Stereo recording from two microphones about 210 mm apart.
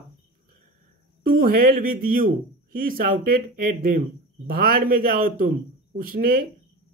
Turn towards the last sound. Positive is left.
turn(degrees=-45)  # may be behind; listen again after turning